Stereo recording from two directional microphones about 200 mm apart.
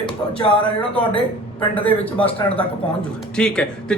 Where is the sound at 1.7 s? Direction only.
5° left (ahead or behind).